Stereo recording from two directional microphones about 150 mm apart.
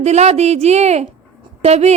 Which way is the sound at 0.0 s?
50° right (ahead or behind).